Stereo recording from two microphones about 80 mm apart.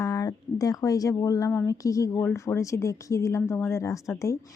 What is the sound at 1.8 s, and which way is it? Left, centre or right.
Speech, left.